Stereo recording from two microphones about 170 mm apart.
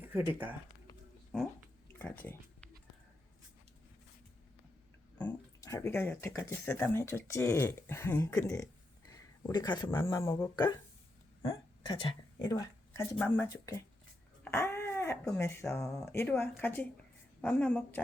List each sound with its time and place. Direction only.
0.1 s speech: 10° right (ahead or behind)
5.1 s speech: 20° left (ahead or behind)
9.1 s a sound: 25° left (ahead or behind)
9.9 s speech: 15° left (ahead or behind)
13.1 s speech: 10° left (ahead or behind)
14.4 s a sound: 15° left (ahead or behind)
15.3 s speech: 15° left (ahead or behind)